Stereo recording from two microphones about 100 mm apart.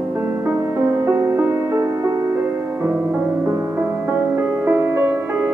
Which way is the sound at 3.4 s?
25° right (ahead or behind).